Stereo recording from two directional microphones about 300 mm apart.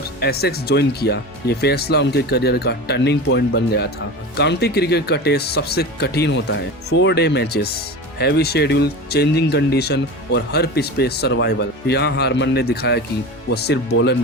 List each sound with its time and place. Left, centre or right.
0.2 s speech: left